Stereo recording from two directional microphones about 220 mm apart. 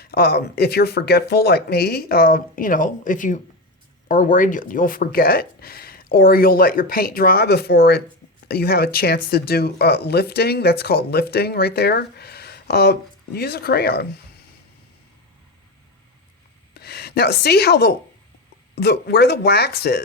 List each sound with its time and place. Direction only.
0.0 s speech: 45° left (ahead or behind)
16.7 s speech: 45° left (ahead or behind)